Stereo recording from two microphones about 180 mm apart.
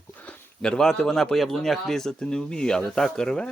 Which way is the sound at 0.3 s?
5° left (ahead or behind).